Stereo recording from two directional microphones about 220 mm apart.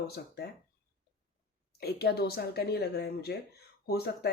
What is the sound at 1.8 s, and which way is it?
Speech, 45° left (ahead or behind).